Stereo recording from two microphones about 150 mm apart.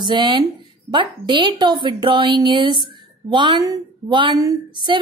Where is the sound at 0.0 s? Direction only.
30° right (ahead or behind).